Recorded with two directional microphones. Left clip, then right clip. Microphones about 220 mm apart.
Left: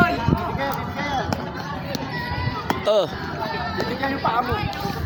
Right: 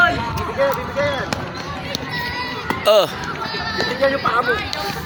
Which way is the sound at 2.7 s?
5° left (ahead or behind).